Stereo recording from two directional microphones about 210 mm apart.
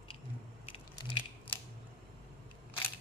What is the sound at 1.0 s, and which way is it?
Biting, 25° left (ahead or behind).